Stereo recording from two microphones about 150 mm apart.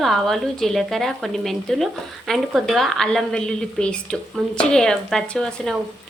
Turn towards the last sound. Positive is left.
turn(degrees=5)  # may be behind; listen again after turning